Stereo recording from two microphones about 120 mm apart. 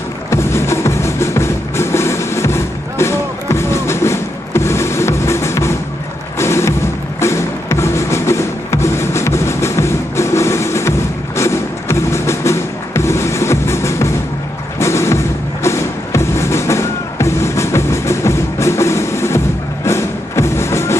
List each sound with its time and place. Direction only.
0.3 s music: 20° left (ahead or behind)